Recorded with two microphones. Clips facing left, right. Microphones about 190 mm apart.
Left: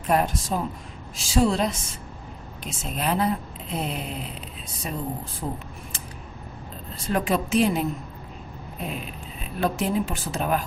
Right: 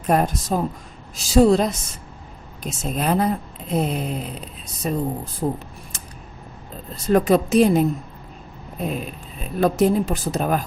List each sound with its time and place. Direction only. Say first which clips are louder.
0.0 s speech: right 3 dB; 40° right (ahead or behind)
6.9 s speech: right 8 dB; 40° right (ahead or behind)
8.9 s speech: right 5 dB; 45° right (ahead or behind)